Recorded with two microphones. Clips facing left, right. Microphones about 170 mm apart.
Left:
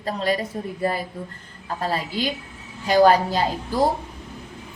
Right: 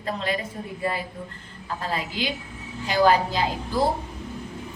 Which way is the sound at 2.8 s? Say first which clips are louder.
Left 4 dB; 40° left (ahead or behind).